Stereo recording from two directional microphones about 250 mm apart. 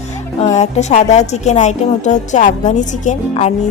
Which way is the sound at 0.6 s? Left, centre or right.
Left.